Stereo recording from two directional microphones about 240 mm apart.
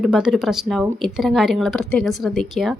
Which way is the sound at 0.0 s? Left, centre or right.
Centre.